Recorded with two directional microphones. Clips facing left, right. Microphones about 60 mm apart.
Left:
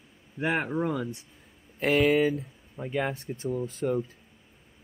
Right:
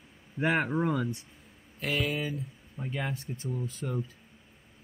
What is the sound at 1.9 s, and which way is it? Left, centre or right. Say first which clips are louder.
Speech: left 9 dB; left.